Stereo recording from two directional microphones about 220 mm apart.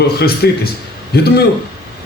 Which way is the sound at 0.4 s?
45° left (ahead or behind).